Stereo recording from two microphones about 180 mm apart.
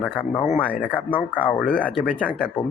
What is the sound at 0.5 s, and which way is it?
Speech, 5° left (ahead or behind).